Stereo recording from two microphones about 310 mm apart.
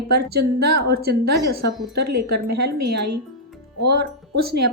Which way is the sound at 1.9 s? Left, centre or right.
Right.